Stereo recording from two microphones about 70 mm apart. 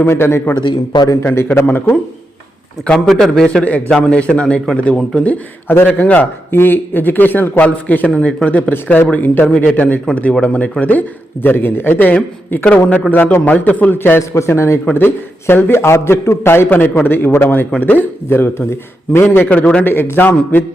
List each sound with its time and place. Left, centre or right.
0.0 s a man's voice: left
0.7 s a man's voice: left
1.2 s a man's voice: left
3.1 s a man's voice: centre
3.6 s a man's voice: centre
14.2 s a man's voice: left; by 19.8 s centre
19.8 s a man's voice: left